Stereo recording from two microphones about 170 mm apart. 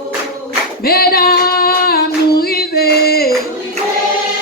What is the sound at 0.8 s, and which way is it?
Female singing, 65° left (ahead or behind).